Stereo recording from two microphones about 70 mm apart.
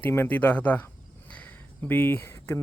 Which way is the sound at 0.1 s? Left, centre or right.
Left.